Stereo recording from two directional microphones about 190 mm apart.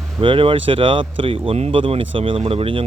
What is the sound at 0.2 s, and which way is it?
Speech, 30° right (ahead or behind).